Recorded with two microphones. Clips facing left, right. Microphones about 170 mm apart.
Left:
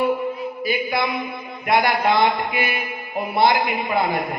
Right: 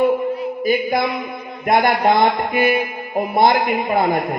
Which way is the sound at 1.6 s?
45° right (ahead or behind).